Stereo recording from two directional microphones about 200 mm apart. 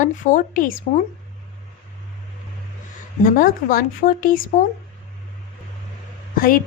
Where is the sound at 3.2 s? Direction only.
45° left (ahead or behind).